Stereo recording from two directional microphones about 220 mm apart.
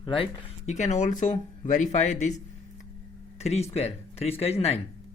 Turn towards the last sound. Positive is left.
turn(degrees=30)  # may be behind; listen again after turning